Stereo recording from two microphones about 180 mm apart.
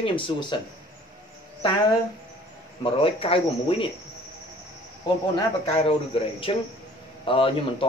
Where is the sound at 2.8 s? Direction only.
30° left (ahead or behind).